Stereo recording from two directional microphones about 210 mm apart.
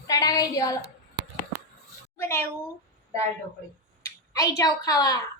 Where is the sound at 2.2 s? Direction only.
10° left (ahead or behind).